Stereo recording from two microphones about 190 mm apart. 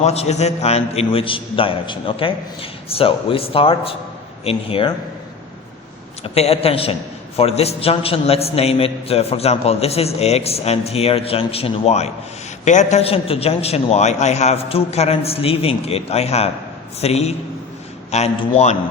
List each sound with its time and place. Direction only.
0.0 s a man's voice: 35° left (ahead or behind)
6.2 s a man's voice: 30° left (ahead or behind)